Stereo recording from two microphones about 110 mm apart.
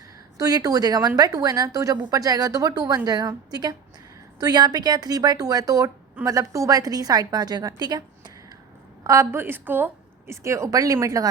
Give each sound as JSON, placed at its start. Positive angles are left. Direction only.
{"t": 0.3, "sound": "a woman's voice", "side_deg": -35}
{"t": 9.0, "sound": "speech", "side_deg": -30}
{"t": 9.4, "sound": "speech", "side_deg": -20}